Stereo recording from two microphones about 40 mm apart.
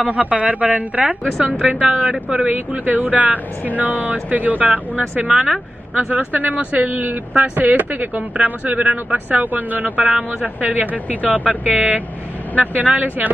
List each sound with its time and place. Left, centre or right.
0.0 s speech: right
2.7 s a woman's voice: right
5.3 s speech: centre
5.9 s a woman's voice: right